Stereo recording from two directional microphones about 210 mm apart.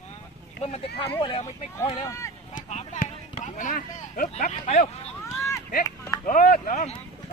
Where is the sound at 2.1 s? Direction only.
15° left (ahead or behind).